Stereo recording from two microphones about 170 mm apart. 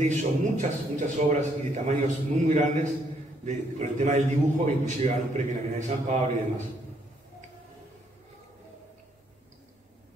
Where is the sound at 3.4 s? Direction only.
45° right (ahead or behind).